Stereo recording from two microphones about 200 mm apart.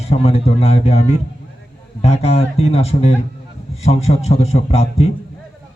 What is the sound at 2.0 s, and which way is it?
A man's voice, 30° left (ahead or behind).